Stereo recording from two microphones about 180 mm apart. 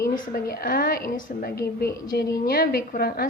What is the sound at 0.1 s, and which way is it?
A woman's voice, 55° left (ahead or behind).